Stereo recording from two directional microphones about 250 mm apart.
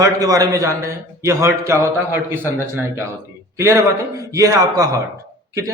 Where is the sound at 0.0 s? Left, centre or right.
Centre.